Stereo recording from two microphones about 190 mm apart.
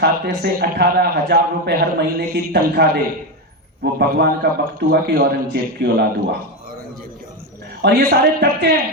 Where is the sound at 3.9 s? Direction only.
55° right (ahead or behind).